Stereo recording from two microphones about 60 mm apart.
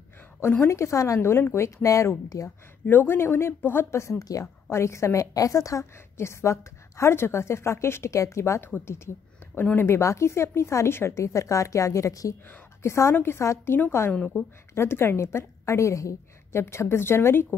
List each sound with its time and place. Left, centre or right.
0.7 s a woman's voice: left
2.2 s speech: left
2.9 s speech: left
4.0 s a woman's voice: left
4.6 s a woman's voice: left
6.1 s a woman's voice: left
8.6 s speech: left
9.8 s a woman's voice: left
11.1 s a woman's voice: left
12.8 s a woman's voice: left
13.1 s a woman's voice: left
14.1 s a woman's voice: centre
14.7 s a woman's voice: left
16.6 s a woman's voice: left